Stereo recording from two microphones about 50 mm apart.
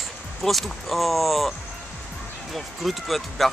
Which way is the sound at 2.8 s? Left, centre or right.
Centre.